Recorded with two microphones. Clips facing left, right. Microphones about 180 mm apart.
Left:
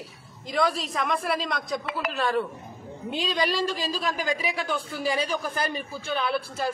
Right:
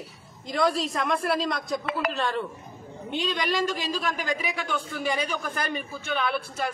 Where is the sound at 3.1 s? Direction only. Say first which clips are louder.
Left 1 dB; 35° left (ahead or behind).